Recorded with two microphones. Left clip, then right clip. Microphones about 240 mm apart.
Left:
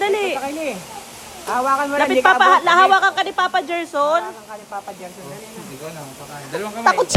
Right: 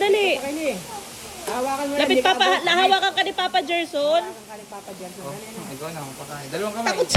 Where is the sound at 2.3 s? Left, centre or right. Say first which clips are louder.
Left 6 dB; centre.